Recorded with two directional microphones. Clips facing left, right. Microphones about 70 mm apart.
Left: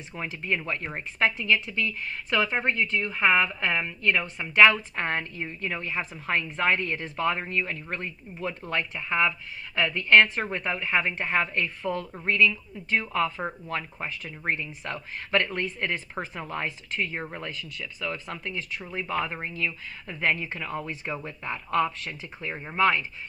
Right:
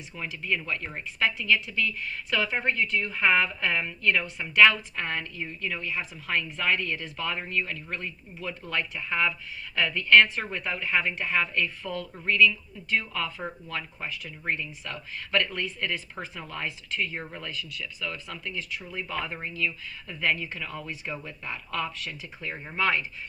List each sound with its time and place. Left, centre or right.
0.1 s a woman's voice: left
22.5 s speech: centre